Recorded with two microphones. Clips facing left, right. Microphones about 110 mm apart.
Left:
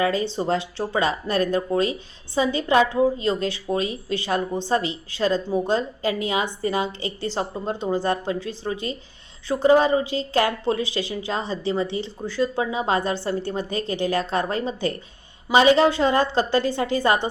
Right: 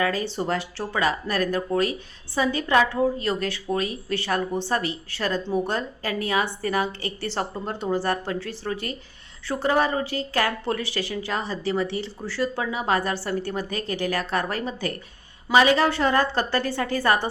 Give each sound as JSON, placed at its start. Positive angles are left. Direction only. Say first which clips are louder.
{"t": 0.0, "sound": "speech", "louder": "left 3 dB", "side_deg": 25}